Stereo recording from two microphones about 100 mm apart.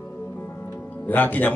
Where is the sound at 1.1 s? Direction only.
20° left (ahead or behind).